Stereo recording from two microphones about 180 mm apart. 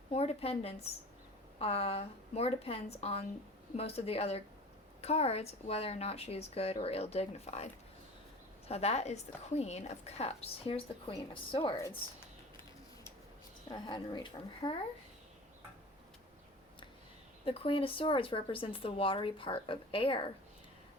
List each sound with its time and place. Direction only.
0.1 s a woman's voice: 35° left (ahead or behind)
13.7 s speech: 25° left (ahead or behind)
17.4 s speech: 30° left (ahead or behind)